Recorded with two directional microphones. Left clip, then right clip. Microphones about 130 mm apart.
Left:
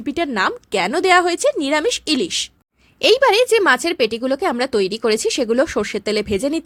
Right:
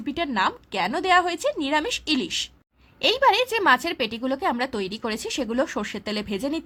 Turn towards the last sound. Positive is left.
turn(degrees=45)  # may be behind; listen again after turning